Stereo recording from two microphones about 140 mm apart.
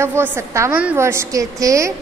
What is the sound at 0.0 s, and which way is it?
A woman's voice, 20° right (ahead or behind).